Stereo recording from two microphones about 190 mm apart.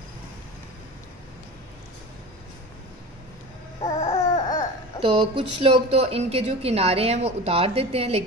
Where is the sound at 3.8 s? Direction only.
20° left (ahead or behind).